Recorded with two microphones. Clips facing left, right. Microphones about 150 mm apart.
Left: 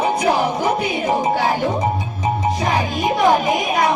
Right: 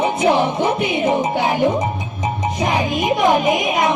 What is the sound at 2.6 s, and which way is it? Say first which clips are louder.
Music: right 1 dB; 20° right (ahead or behind).